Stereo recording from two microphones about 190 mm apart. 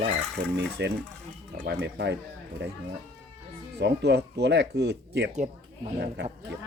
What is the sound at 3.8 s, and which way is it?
Speech, 60° right (ahead or behind).